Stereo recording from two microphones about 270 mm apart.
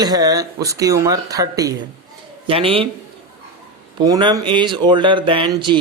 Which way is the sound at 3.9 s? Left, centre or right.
Centre.